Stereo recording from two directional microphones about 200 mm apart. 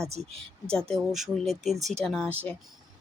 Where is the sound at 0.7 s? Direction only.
5° left (ahead or behind).